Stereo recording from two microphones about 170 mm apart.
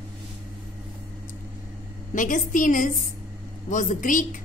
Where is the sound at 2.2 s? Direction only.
50° left (ahead or behind).